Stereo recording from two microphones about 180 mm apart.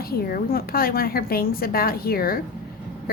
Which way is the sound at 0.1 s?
55° left (ahead or behind).